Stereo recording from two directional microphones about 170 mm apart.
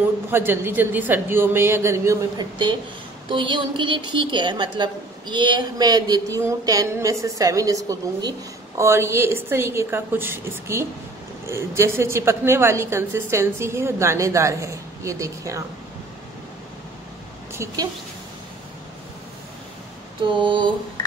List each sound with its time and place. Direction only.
0.3 s a woman's voice: 10° right (ahead or behind)
20.2 s a woman's voice: 30° right (ahead or behind)